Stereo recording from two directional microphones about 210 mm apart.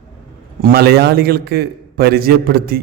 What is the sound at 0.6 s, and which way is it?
A man's voice, 45° right (ahead or behind).